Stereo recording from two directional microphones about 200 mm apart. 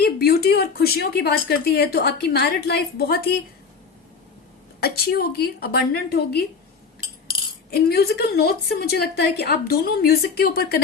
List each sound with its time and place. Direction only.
0.0 s speech: 50° left (ahead or behind)
4.8 s speech: 50° left (ahead or behind)
7.7 s speech: 50° left (ahead or behind)